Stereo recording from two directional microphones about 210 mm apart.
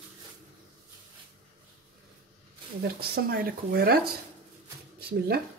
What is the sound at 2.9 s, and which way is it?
Speech, 45° right (ahead or behind).